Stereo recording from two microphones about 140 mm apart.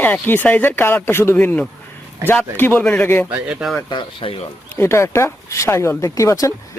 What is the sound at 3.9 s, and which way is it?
Speech, 35° left (ahead or behind).